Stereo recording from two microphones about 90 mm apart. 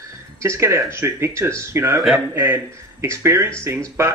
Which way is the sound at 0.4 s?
30° right (ahead or behind).